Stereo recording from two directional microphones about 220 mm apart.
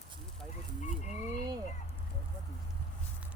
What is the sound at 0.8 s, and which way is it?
Frog, 35° left (ahead or behind).